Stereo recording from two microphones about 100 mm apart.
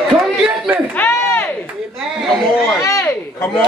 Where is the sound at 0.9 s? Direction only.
20° left (ahead or behind).